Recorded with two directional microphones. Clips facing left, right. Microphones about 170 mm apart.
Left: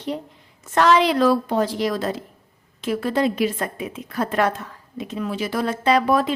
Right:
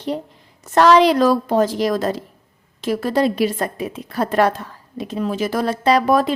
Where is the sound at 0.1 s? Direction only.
45° right (ahead or behind).